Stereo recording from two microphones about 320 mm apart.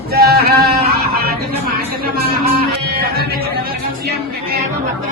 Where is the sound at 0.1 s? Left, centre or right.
Right.